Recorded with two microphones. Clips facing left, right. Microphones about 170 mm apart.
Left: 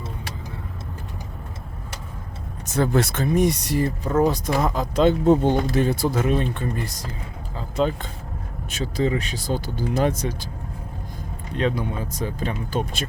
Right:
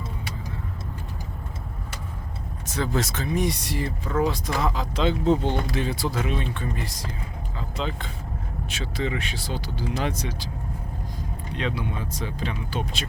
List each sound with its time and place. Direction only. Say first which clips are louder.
2.7 s speech: left 6 dB; 55° left (ahead or behind)
7.5 s vehicle: left 8 dB; 45° left (ahead or behind)
8.7 s speech: left 6 dB; 40° left (ahead or behind)
11.5 s speech: left 5 dB; 45° left (ahead or behind)